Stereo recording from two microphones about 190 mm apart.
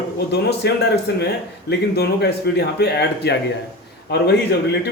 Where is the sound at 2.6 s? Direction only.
60° left (ahead or behind).